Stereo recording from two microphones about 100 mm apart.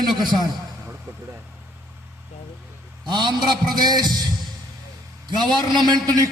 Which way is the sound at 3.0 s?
50° right (ahead or behind).